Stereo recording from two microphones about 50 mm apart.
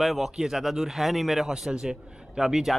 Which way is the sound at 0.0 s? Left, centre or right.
Centre.